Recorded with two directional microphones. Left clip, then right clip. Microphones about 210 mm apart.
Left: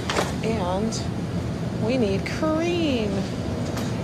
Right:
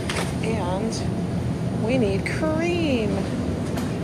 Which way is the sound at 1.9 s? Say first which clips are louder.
Right 1 dB; 10° left (ahead or behind).